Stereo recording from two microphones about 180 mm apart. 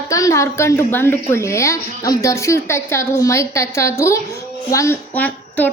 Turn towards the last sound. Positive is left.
turn(degrees=10)  # may be behind; listen again after turning